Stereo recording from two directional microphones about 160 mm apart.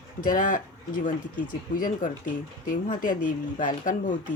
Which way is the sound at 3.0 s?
55° left (ahead or behind).